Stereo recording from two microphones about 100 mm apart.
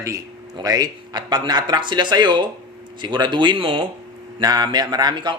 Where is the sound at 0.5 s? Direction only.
40° right (ahead or behind); by 3.8 s 55° right (ahead or behind).